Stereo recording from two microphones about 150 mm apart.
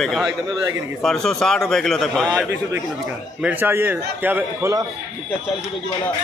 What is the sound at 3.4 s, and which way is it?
A man's voice, 15° right (ahead or behind).